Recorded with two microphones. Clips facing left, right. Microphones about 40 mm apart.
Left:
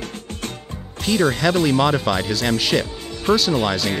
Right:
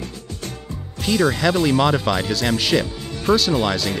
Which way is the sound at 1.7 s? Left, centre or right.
Centre.